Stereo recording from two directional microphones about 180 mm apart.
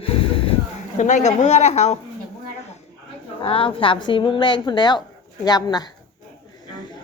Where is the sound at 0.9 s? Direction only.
40° left (ahead or behind).